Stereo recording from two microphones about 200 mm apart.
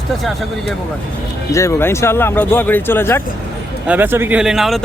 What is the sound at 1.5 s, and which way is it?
Speech, 15° left (ahead or behind).